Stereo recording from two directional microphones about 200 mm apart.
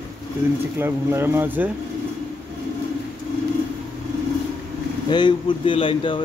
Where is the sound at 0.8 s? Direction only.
10° right (ahead or behind).